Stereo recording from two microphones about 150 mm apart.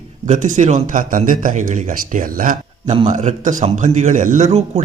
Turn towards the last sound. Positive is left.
turn(degrees=-45)  # may be behind; listen again after turning